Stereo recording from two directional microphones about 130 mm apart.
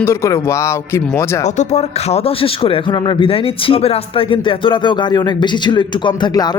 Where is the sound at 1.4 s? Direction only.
65° left (ahead or behind).